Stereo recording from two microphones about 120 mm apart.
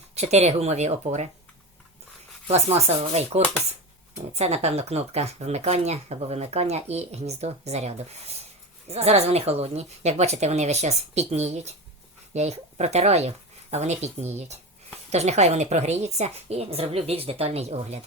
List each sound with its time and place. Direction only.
0.1 s speech: 65° right (ahead or behind)
2.5 s speech: 65° right (ahead or behind)